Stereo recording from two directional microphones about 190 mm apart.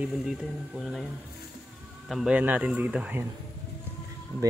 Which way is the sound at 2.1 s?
5° right (ahead or behind).